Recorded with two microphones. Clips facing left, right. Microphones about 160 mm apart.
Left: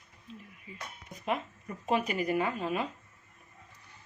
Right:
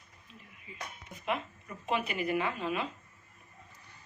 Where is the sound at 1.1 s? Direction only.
40° left (ahead or behind).